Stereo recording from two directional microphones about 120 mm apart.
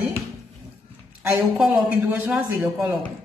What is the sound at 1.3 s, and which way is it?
Speech, 5° right (ahead or behind).